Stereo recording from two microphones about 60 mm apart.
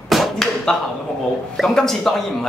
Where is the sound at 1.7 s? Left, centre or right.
Centre.